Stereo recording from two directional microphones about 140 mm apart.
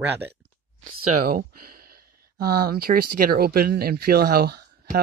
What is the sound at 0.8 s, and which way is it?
Speech, 80° right.